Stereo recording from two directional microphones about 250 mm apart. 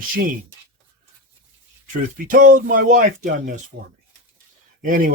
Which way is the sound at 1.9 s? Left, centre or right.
Right.